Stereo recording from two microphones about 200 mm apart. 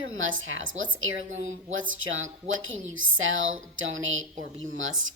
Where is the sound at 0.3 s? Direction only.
80° right.